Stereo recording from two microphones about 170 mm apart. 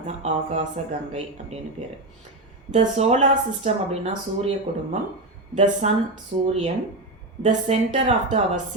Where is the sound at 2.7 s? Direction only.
40° right (ahead or behind).